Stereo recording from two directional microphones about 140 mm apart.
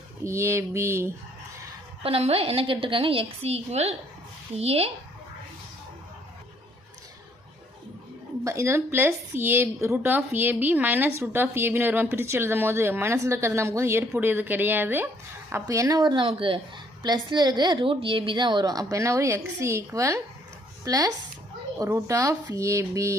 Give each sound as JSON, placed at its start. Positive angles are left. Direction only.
{"t": 0.3, "sound": "a woman's voice", "side_deg": -20}
{"t": 2.0, "sound": "a woman's voice", "side_deg": -45}
{"t": 8.4, "sound": "a woman's voice", "side_deg": -20}